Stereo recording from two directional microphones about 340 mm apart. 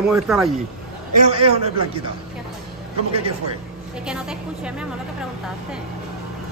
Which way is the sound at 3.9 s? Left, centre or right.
Centre.